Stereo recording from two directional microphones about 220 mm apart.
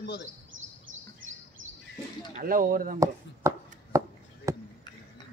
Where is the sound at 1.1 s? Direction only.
60° right (ahead or behind).